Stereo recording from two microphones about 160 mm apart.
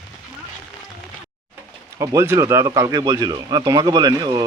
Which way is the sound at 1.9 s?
20° right (ahead or behind).